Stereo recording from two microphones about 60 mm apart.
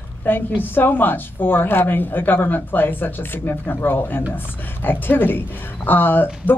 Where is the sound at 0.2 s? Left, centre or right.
Left.